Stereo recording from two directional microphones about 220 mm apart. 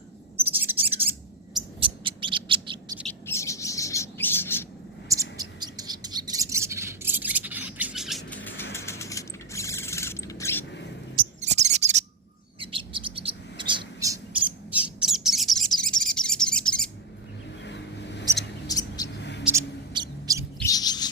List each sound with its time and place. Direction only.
0.5 s bird: 10° right (ahead or behind)
1.8 s owl: 25° right (ahead or behind)
3.1 s bird: 10° left (ahead or behind)
5.0 s bird: 15° right (ahead or behind)
8.7 s a sound: 15° left (ahead or behind)
11.1 s bird: 35° right (ahead or behind); by 14.2 s 20° right (ahead or behind)
14.7 s bird: 5° right (ahead or behind)
17.7 s vehicle: 50° left (ahead or behind)
18.7 s a sound: 15° left (ahead or behind)
19.0 s a sound: 50° left (ahead or behind)
19.5 s a sound: 15° right (ahead or behind)
20.6 s bird: 15° left (ahead or behind)